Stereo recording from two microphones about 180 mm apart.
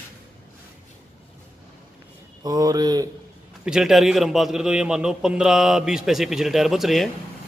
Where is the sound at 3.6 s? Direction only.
5° right (ahead or behind).